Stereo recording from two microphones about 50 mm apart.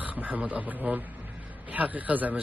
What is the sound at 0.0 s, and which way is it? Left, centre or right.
A man's voice, right.